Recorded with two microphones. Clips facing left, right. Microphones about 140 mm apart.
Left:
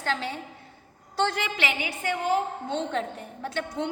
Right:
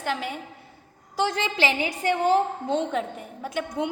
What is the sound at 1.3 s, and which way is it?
A woman's voice, 30° right (ahead or behind).